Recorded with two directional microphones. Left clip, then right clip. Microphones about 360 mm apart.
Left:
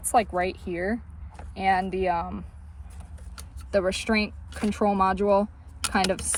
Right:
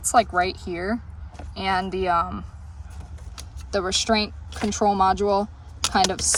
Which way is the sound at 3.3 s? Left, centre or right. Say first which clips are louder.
Left 1 dB; centre.